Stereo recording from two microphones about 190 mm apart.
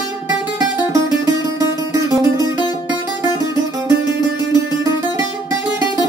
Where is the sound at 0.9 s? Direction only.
20° right (ahead or behind).